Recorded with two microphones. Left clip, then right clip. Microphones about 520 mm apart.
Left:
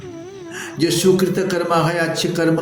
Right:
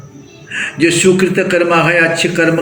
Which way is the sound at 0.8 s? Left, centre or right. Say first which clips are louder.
Right 5 dB; left.